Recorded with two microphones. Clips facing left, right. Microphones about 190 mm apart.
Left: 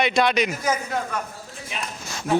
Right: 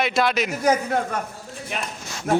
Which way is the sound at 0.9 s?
55° right (ahead or behind).